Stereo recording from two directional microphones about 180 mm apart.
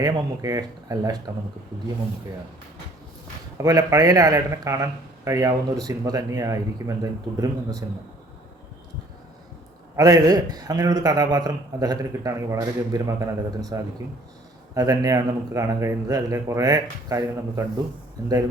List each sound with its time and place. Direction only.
0.0 s a man's voice: 20° right (ahead or behind)
3.6 s a man's voice: 20° right (ahead or behind)
9.9 s a man's voice: 20° right (ahead or behind)
14.8 s a man's voice: 20° right (ahead or behind)